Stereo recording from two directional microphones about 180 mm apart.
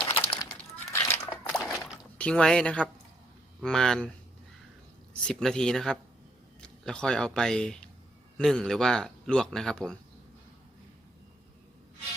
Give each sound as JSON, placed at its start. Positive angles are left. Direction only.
{"t": 0.0, "sound": "a sound", "side_deg": 25}
{"t": 1.0, "sound": "slosh", "side_deg": 10}
{"t": 2.1, "sound": "a man's voice", "side_deg": 5}
{"t": 5.2, "sound": "a man's voice", "side_deg": 5}